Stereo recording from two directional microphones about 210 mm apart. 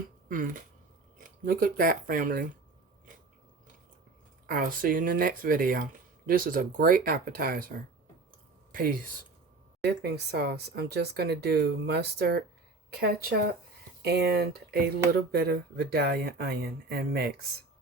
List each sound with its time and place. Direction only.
0.3 s speech: 40° right (ahead or behind)
4.4 s speech: 45° right (ahead or behind)